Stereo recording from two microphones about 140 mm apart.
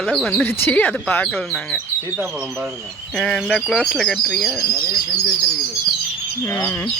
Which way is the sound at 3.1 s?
5° left (ahead or behind).